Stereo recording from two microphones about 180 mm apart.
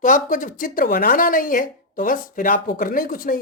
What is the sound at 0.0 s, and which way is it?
Speech, 45° left (ahead or behind).